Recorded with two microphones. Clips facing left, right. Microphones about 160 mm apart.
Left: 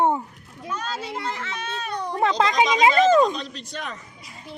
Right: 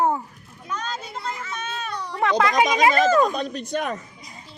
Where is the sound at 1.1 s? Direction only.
85° left.